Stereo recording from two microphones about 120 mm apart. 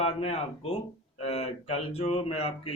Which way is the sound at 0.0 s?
55° left (ahead or behind).